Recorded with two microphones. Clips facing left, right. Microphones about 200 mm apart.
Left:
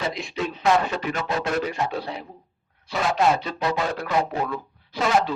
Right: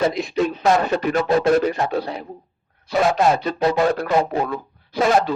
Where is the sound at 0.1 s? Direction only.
45° right (ahead or behind).